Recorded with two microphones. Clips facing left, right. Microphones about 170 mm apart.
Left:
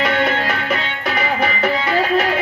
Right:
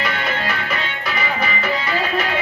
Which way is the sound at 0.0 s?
60° left (ahead or behind).